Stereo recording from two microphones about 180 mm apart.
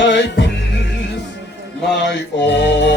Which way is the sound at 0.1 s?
75° left (ahead or behind).